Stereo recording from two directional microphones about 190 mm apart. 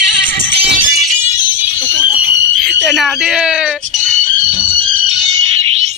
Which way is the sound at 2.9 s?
Centre (ahead or behind).